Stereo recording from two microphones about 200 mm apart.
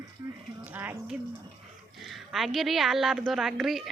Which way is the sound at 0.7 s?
10° right (ahead or behind).